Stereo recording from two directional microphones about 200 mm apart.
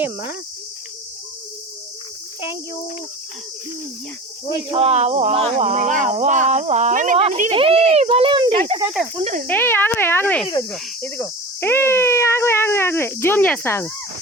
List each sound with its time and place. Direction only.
4.7 s a child's voice: 30° right (ahead or behind)
9.1 s speech: 35° right (ahead or behind)
9.5 s speech: 10° left (ahead or behind)
10.4 s cricket: 20° left (ahead or behind)
10.7 s speech: 10° left (ahead or behind)